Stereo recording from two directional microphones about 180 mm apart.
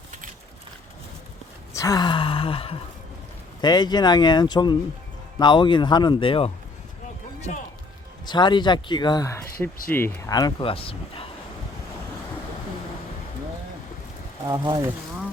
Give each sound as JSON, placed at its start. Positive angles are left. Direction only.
{"t": 1.7, "sound": "gasp", "side_deg": 20}
{"t": 3.6, "sound": "speech", "side_deg": 25}
{"t": 8.3, "sound": "speech", "side_deg": 25}
{"t": 9.6, "sound": "speech", "side_deg": 55}
{"t": 9.9, "sound": "speech", "side_deg": 10}
{"t": 14.4, "sound": "speech", "side_deg": -20}